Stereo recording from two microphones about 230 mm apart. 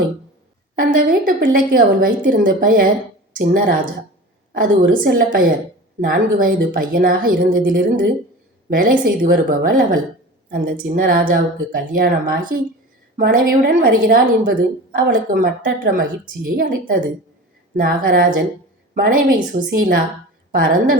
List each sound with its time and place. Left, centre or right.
0.8 s a woman's voice: right